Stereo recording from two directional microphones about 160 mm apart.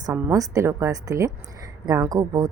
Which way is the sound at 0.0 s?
20° right (ahead or behind).